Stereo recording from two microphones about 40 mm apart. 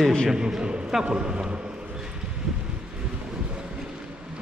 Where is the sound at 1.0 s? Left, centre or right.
Right.